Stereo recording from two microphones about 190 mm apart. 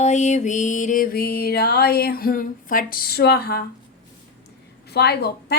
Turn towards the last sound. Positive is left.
turn(degrees=60)  # may be behind; listen again after turning